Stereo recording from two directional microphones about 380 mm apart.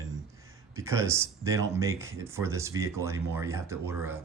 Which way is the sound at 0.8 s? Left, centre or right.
Centre.